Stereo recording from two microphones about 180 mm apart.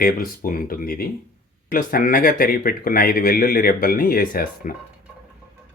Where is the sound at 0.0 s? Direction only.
50° left (ahead or behind).